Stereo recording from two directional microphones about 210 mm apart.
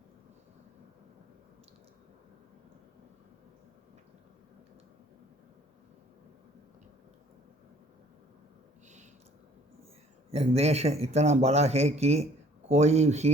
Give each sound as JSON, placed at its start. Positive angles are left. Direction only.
{"t": 10.3, "sound": "speech", "side_deg": -30}